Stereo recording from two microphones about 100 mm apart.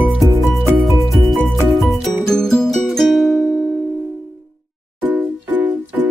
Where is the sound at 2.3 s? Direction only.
5° left (ahead or behind).